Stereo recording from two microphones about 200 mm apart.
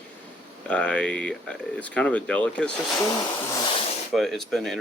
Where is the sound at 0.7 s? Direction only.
5° left (ahead or behind).